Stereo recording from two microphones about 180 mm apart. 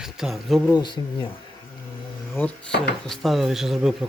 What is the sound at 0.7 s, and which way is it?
Speech, 25° left (ahead or behind).